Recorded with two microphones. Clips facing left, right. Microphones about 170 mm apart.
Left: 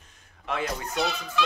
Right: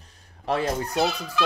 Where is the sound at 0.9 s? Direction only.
Centre (ahead or behind).